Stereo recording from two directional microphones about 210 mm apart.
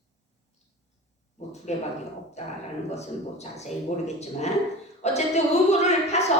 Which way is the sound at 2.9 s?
30° left (ahead or behind).